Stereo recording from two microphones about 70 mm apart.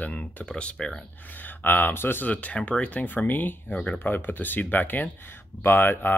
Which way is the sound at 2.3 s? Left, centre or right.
Left.